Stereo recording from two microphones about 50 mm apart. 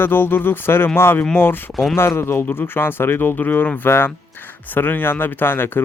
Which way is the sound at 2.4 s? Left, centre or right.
Left.